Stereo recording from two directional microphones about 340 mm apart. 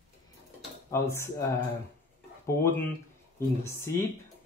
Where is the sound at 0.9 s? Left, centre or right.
Centre.